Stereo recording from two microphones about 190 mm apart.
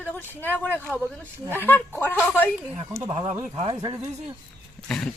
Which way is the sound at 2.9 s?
15° right (ahead or behind).